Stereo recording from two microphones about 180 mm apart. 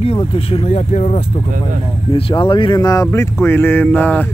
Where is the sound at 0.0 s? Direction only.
30° left (ahead or behind).